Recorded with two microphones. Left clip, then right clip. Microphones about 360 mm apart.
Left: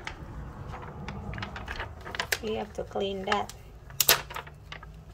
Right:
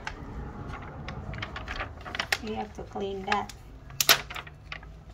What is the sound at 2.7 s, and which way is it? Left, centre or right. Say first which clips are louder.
Speech: left 3 dB; centre.